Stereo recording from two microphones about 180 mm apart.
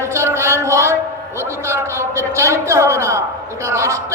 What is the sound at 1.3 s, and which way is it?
A man's voice, 15° right (ahead or behind).